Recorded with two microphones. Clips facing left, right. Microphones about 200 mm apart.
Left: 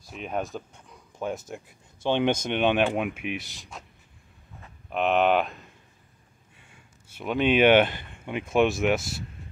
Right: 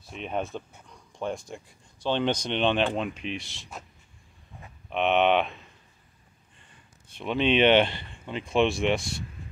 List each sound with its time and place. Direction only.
0.1 s speech: 5° left (ahead or behind)
4.8 s speech: centre (ahead or behind)
6.6 s a sound: 10° left (ahead or behind)
8.3 s speech: 10° left (ahead or behind)